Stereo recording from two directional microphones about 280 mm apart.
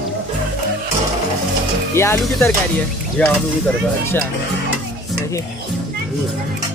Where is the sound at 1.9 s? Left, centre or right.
Centre.